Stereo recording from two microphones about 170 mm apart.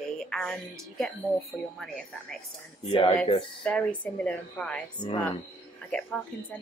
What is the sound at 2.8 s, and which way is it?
Speech, 30° left (ahead or behind).